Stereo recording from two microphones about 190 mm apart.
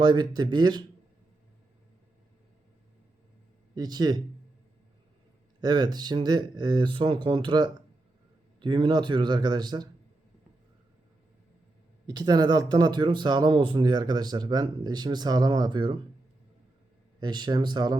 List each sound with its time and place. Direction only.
0.0 s speech: 25° right (ahead or behind)
3.8 s speech: 20° right (ahead or behind)
5.5 s speech: 20° right (ahead or behind)
12.0 s speech: 20° right (ahead or behind)
17.2 s speech: 20° right (ahead or behind)